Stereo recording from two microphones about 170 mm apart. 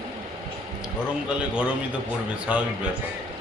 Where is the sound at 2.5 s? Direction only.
5° right (ahead or behind).